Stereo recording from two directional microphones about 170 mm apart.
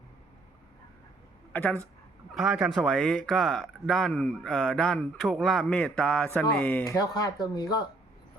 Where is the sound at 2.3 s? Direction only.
Centre (ahead or behind).